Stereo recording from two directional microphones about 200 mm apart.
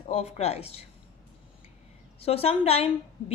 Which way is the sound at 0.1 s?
30° left (ahead or behind).